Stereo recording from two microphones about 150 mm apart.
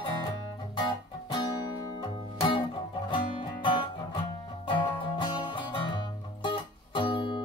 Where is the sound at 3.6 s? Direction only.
30° left (ahead or behind).